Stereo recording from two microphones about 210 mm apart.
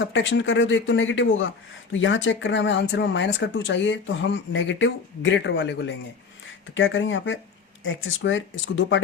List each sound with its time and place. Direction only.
0.0 s speech: 60° left (ahead or behind)